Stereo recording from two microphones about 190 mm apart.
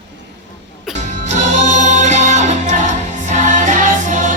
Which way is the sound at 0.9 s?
40° right (ahead or behind).